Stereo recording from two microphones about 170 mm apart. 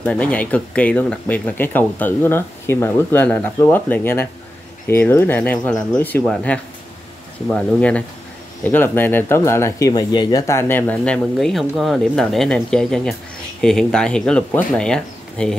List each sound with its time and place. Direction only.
0.0 s speech: 5° left (ahead or behind)